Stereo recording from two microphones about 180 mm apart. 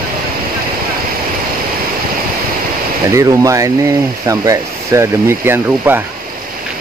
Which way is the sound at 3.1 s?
15° right (ahead or behind).